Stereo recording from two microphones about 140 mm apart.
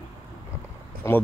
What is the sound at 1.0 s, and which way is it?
Speech, 20° left (ahead or behind).